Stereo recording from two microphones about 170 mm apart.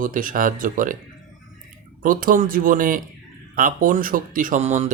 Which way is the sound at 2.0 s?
55° right (ahead or behind).